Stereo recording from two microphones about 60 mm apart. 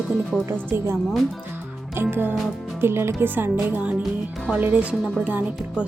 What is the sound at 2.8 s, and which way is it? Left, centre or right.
Speech, right.